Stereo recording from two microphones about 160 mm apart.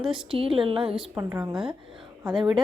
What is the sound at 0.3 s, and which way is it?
Speech, 35° right (ahead or behind).